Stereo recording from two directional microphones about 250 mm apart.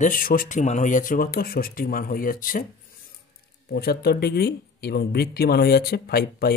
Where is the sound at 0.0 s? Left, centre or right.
Left.